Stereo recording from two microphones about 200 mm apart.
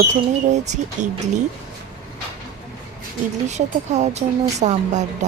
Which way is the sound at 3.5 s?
35° right (ahead or behind).